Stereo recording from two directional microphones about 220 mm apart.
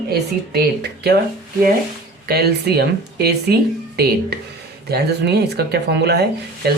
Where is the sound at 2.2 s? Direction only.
45° right (ahead or behind).